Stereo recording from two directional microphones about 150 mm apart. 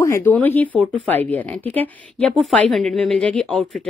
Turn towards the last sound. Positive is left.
turn(degrees=0)  # may be behind; listen again after turning